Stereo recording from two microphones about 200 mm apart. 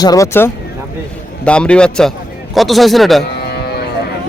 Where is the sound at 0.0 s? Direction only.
15° left (ahead or behind); by 3.2 s centre (ahead or behind).